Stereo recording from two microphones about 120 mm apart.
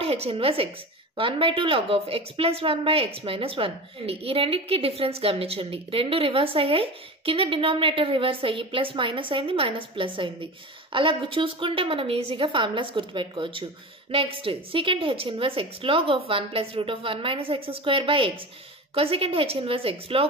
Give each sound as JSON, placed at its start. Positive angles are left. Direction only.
{"t": 0.0, "sound": "a woman's voice", "side_deg": -55}